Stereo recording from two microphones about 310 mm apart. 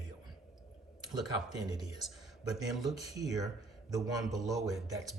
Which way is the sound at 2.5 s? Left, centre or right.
Centre.